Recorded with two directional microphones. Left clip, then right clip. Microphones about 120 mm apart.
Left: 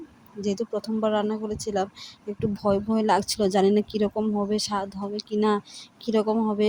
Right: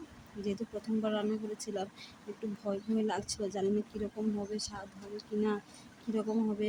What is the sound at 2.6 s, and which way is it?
Speech, 60° left (ahead or behind).